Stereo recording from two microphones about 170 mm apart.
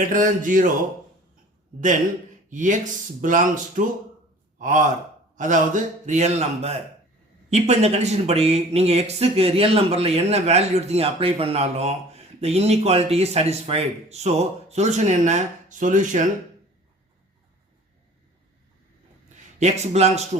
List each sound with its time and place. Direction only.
0.0 s speech: 50° right (ahead or behind)
2.5 s speech: 50° right (ahead or behind)
19.5 s speech: 40° right (ahead or behind)